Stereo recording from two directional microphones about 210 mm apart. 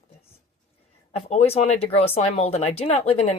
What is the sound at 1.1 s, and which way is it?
Speech, 30° left (ahead or behind).